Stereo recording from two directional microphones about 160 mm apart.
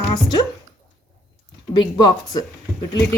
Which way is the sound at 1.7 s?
25° left (ahead or behind).